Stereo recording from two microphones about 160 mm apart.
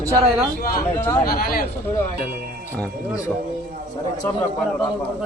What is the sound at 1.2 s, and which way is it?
Speech, 70° left (ahead or behind).